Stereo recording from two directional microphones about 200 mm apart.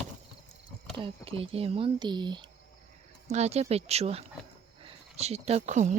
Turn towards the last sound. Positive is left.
turn(degrees=-35)  # may be behind; listen again after turning